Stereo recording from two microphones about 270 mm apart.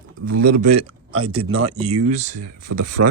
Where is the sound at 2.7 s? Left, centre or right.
Right.